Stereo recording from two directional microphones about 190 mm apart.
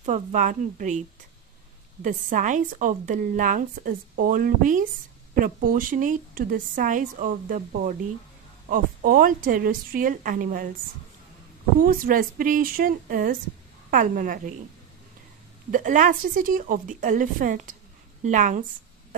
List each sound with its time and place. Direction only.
0.0 s a woman's voice: 40° right (ahead or behind)
2.0 s a woman's voice: 45° right (ahead or behind)
11.8 s a woman's voice: 45° right (ahead or behind)
15.7 s a woman's voice: 45° right (ahead or behind)